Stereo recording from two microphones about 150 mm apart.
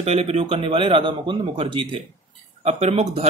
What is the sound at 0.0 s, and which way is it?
Speech, 45° right (ahead or behind).